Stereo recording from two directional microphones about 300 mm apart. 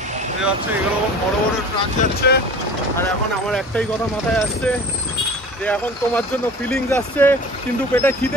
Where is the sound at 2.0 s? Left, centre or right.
Left.